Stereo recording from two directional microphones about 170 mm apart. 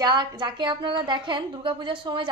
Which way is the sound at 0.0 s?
25° right (ahead or behind).